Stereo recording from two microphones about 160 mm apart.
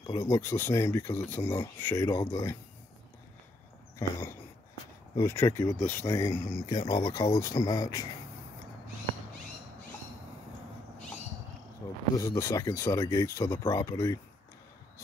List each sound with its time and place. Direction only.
0.0 s speech: 20° left (ahead or behind)
5.1 s speech: 15° left (ahead or behind)
11.8 s speech: 20° left (ahead or behind)